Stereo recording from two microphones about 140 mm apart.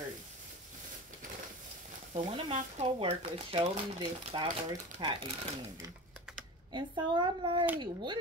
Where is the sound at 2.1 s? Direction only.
50° right (ahead or behind); by 5.2 s 35° right (ahead or behind).